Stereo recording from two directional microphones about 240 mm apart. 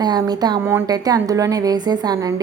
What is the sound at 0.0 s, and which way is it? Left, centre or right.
A woman's voice, centre.